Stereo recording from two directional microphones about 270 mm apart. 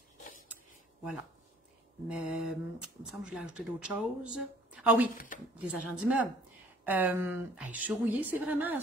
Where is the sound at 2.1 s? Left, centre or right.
Centre.